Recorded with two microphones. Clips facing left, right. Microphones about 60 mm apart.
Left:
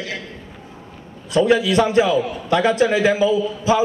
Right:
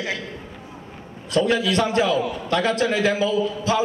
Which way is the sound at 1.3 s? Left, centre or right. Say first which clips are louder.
Left 4 dB; centre.